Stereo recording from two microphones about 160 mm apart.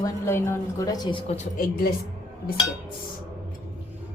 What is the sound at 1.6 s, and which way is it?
Speech, 70° left (ahead or behind).